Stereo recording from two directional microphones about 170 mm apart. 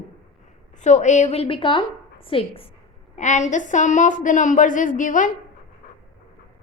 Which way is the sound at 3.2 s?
45° left (ahead or behind).